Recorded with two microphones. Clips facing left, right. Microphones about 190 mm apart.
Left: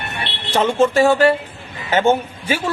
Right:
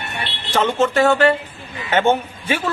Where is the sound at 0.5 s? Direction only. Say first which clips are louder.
Left 2 dB; 10° left (ahead or behind).